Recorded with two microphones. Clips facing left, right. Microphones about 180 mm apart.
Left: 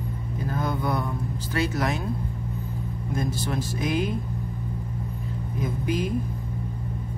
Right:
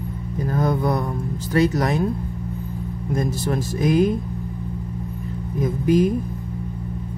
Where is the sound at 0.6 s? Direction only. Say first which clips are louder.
Right 6 dB; 40° right (ahead or behind).